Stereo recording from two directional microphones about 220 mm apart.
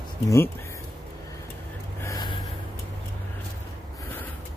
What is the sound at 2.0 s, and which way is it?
Gasp, 15° left (ahead or behind).